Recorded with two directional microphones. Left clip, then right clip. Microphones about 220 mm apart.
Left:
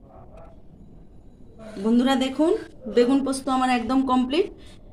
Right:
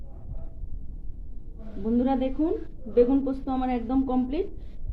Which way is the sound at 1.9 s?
35° left (ahead or behind).